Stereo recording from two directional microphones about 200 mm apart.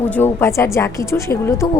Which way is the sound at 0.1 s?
10° left (ahead or behind).